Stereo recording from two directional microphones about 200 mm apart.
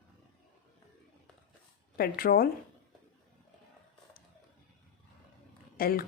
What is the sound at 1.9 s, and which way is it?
Speech, 45° left (ahead or behind).